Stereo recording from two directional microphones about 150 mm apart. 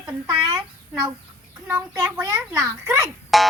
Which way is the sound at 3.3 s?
Centre (ahead or behind).